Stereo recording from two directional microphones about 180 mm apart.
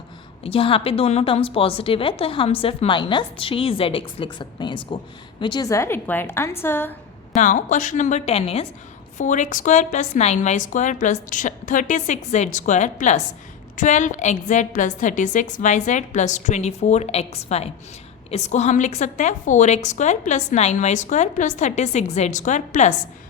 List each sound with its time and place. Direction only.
0.4 s a woman's voice: 30° left (ahead or behind); by 6.9 s 10° left (ahead or behind)
7.3 s a woman's voice: 45° left (ahead or behind)